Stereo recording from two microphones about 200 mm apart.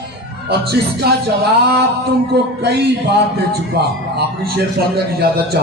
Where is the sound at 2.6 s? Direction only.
60° right (ahead or behind).